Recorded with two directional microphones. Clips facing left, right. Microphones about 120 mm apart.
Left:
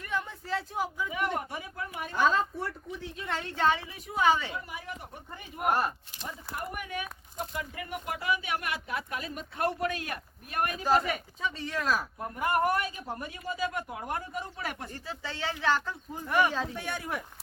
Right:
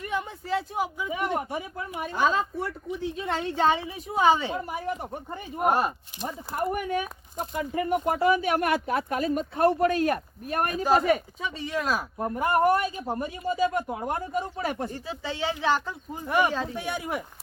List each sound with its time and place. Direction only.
0.0 s a sound: 15° right (ahead or behind)
1.1 s speech: 20° right (ahead or behind)
2.2 s speech: 10° right (ahead or behind); by 4.5 s 25° right (ahead or behind)
4.5 s speech: 40° right (ahead or behind)
5.7 s speech: 20° right (ahead or behind)
6.2 s speech: 40° right (ahead or behind)
11.4 s speech: 10° right (ahead or behind)
12.2 s speech: 30° right (ahead or behind)
14.8 s speech: 15° right (ahead or behind)